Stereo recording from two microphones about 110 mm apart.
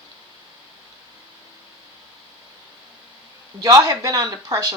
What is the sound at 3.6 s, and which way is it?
A man's voice, 35° right (ahead or behind).